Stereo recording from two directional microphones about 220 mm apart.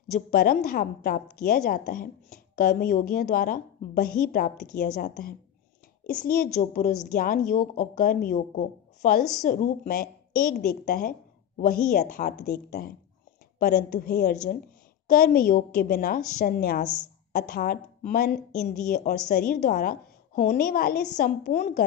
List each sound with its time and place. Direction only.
0.1 s a woman's voice: 40° left (ahead or behind)
16.8 s speech: 5° left (ahead or behind)
17.3 s a woman's voice: 40° left (ahead or behind)
19.0 s a woman's voice: 45° left (ahead or behind)